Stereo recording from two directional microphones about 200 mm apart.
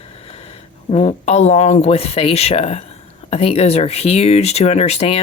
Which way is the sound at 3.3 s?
30° left (ahead or behind).